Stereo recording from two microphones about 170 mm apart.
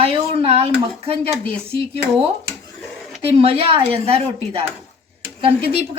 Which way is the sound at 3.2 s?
35° right (ahead or behind).